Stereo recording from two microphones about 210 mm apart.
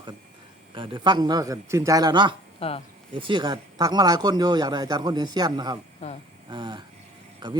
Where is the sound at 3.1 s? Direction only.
25° right (ahead or behind).